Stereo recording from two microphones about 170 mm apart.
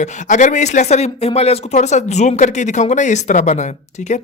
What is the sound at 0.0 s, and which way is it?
Speech, 45° left (ahead or behind).